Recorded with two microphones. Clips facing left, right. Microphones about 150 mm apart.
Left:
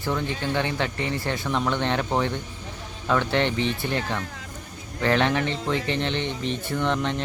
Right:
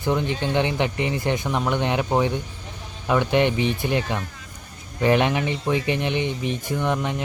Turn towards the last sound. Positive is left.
turn(degrees=-10)  # may be behind; listen again after turning